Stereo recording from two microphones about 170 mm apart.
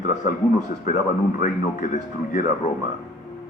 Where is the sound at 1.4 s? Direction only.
50° left (ahead or behind).